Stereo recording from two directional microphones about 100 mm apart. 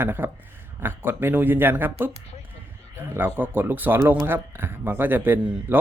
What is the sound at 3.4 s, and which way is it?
Speech, 20° right (ahead or behind).